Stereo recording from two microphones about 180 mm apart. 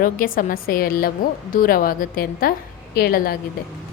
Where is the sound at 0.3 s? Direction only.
50° left (ahead or behind).